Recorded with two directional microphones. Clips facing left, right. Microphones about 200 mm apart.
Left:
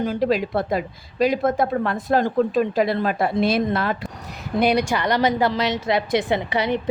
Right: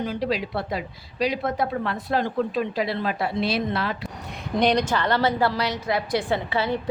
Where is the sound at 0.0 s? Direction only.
50° left (ahead or behind).